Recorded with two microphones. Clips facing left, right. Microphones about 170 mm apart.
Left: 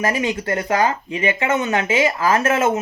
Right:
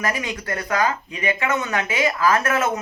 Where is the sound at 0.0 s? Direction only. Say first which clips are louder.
Left 5 dB; 25° left (ahead or behind).